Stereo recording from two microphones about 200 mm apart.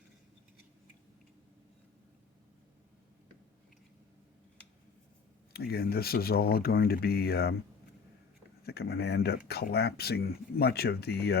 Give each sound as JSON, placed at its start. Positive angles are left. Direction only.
{"t": 5.5, "sound": "speech", "side_deg": 50}
{"t": 8.6, "sound": "speech", "side_deg": 50}